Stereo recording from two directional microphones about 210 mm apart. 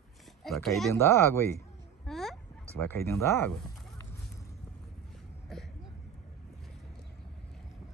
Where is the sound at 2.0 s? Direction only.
Centre (ahead or behind).